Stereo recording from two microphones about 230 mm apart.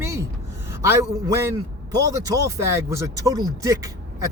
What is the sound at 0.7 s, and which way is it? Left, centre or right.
A man's voice, centre.